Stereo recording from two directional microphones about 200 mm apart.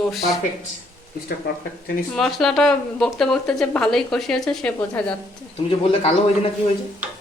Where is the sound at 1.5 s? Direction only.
50° left (ahead or behind).